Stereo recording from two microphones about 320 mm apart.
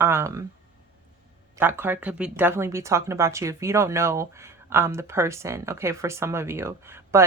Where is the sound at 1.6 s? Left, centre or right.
Centre.